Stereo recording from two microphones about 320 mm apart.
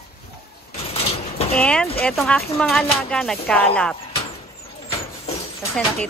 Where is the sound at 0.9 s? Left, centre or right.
Centre.